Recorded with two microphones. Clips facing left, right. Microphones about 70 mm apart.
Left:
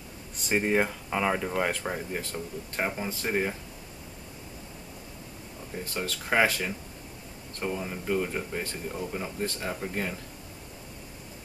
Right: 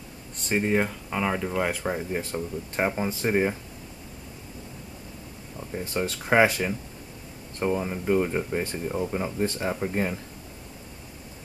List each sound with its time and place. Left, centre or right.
0.4 s speech: centre
1.7 s speech: centre
2.3 s speech: centre
5.9 s speech: right